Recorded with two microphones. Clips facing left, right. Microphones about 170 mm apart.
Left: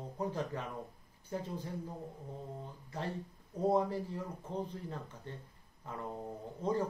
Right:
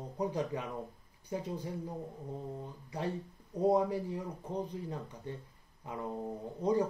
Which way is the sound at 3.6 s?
15° right (ahead or behind).